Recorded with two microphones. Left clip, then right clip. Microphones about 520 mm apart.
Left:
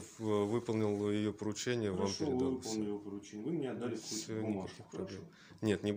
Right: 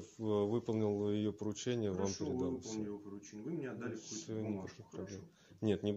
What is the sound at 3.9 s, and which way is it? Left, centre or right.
Speech, right.